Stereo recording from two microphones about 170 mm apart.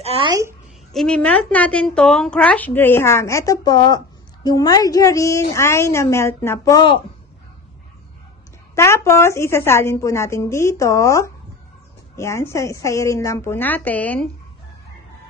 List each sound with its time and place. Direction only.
0.0 s a woman's voice: 30° right (ahead or behind)
0.9 s a woman's voice: 5° left (ahead or behind); by 7.0 s 25° left (ahead or behind)
8.7 s a woman's voice: 15° left (ahead or behind)